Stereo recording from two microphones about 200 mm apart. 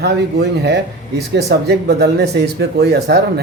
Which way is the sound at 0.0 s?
55° right (ahead or behind).